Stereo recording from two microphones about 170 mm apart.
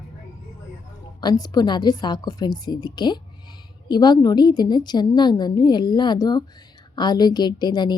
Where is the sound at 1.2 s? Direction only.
25° left (ahead or behind).